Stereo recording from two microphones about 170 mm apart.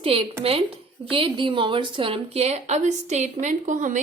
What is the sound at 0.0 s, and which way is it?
A woman's voice, 35° right (ahead or behind).